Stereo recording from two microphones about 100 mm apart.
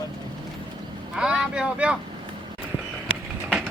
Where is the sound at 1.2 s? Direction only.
5° right (ahead or behind).